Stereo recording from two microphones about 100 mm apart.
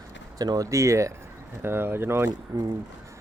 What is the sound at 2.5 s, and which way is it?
Speech, 35° right (ahead or behind).